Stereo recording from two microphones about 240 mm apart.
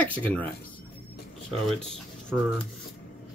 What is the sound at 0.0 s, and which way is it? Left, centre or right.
Speech, centre.